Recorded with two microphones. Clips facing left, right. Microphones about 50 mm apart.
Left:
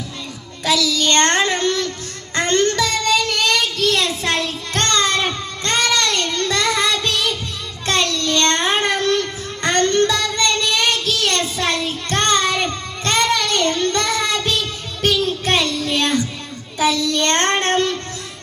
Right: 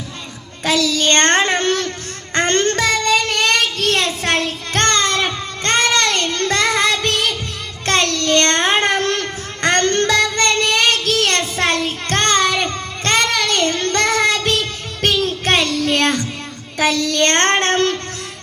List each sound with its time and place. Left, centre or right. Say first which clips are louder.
0.6 s a child's voice: right 1 dB; right
2.3 s child singing: right 1 dB; right